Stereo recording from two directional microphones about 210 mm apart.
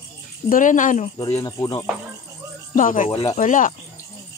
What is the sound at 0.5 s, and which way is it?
Speech, 40° left (ahead or behind).